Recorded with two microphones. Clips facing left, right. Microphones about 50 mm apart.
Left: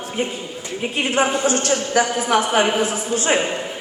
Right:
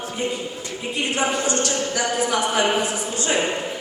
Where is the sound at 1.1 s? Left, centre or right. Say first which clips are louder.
Left 4 dB; left.